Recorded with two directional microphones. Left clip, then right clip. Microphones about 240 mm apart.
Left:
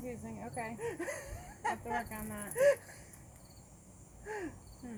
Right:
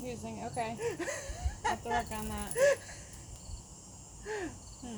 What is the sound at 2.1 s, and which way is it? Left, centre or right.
Speech, right.